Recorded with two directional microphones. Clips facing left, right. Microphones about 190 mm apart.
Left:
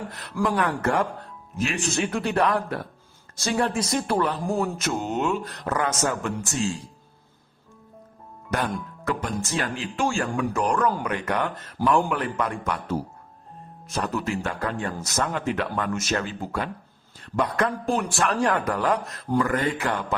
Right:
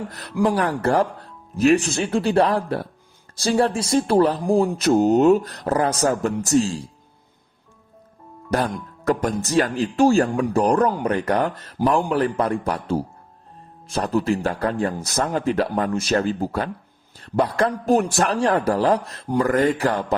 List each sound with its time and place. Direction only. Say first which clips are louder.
0.4 s a man's voice: right 4 dB; 35° right (ahead or behind)
4.9 s a man's voice: right 14 dB; 40° right (ahead or behind)
8.4 s a man's voice: right 4 dB; 35° right (ahead or behind)
19.4 s a man's voice: right 6 dB; 40° right (ahead or behind)